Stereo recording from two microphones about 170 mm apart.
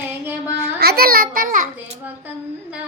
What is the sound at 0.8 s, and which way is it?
Speech, 65° right (ahead or behind).